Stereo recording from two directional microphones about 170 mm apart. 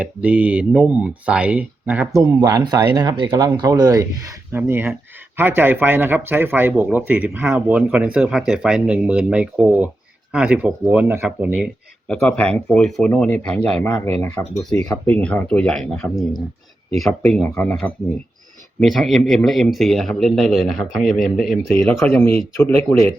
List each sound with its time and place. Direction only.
0.0 s speech: 10° right (ahead or behind)
2.2 s speech: 20° right (ahead or behind)
12.0 s speech: 5° left (ahead or behind)
22.0 s speech: 15° left (ahead or behind)